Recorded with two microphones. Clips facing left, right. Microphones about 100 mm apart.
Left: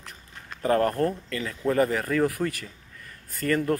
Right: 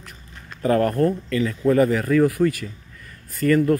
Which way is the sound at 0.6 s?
30° left (ahead or behind).